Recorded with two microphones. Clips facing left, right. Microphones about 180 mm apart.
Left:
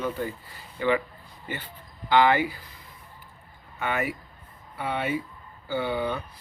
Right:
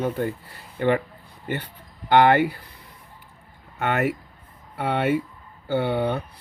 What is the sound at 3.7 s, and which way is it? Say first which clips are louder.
Speech: right 5 dB; 65° right (ahead or behind).